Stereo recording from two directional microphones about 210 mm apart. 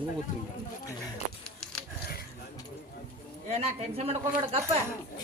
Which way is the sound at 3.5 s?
30° right (ahead or behind).